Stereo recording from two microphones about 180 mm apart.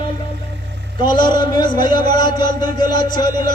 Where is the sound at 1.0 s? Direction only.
25° left (ahead or behind).